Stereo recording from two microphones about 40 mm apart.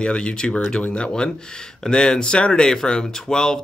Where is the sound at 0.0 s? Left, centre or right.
Left.